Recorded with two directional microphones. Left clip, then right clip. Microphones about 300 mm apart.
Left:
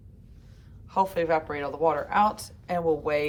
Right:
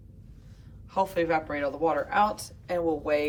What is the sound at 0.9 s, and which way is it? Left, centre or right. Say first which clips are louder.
A woman's voice: left 2 dB; centre.